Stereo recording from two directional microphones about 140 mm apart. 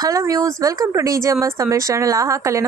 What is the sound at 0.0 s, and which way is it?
Speech, 25° right (ahead or behind).